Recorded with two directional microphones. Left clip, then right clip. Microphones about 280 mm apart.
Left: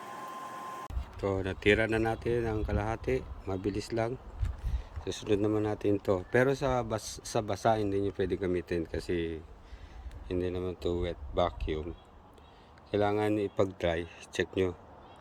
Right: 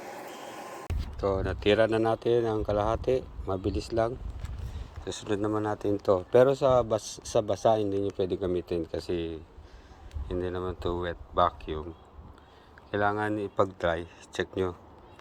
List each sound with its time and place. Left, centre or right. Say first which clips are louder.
1.2 s speech: right 2 dB; centre
1.9 s speech: right 5 dB; centre
3.8 s speech: right 7 dB; centre
5.1 s speech: even; centre
6.5 s speech: right 7 dB; centre
8.9 s speech: right 2 dB; left
10.2 s speech: right 1 dB; centre
12.9 s speech: right 1 dB; centre